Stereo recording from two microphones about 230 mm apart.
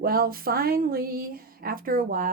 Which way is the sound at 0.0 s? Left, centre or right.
Right.